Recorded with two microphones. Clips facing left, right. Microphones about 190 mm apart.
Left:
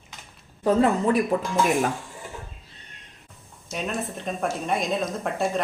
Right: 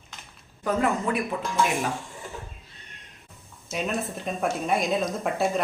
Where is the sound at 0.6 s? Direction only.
30° left (ahead or behind).